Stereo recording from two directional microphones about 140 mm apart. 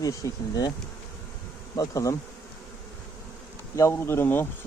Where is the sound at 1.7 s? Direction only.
25° left (ahead or behind).